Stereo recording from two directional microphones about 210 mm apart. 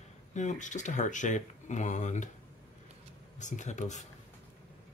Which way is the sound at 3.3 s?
35° left (ahead or behind).